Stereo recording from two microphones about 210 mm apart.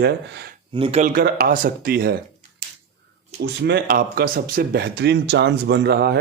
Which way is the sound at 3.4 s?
50° right (ahead or behind).